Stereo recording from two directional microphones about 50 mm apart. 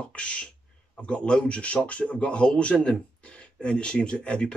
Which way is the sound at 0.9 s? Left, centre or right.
Left.